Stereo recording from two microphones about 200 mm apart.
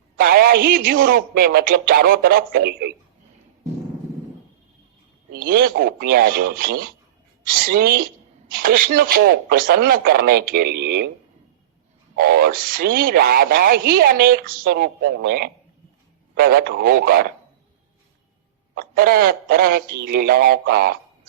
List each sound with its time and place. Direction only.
0.2 s a woman's voice: 50° right (ahead or behind)
5.3 s a woman's voice: 45° right (ahead or behind)
12.1 s a woman's voice: 50° right (ahead or behind)
18.7 s a woman's voice: 50° right (ahead or behind)